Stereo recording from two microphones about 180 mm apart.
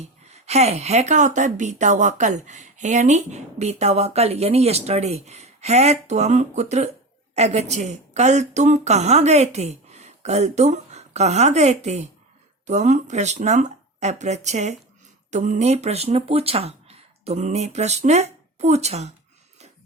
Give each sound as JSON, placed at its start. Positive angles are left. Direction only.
{"t": 0.0, "sound": "a woman's voice", "side_deg": -35}